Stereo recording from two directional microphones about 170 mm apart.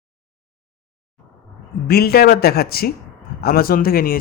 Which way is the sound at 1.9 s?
65° left (ahead or behind).